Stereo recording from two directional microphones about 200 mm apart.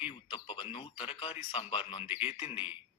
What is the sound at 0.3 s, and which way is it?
A man's voice, 25° left (ahead or behind).